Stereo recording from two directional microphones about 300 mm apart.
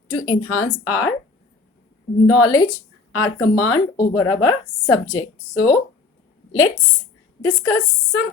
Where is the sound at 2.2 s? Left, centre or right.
Left.